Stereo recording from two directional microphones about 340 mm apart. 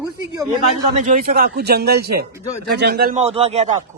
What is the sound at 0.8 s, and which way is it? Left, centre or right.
A man's voice, right.